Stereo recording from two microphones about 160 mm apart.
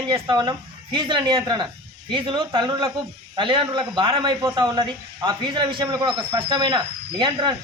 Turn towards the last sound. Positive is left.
turn(degrees=-30)  # may be behind; listen again after turning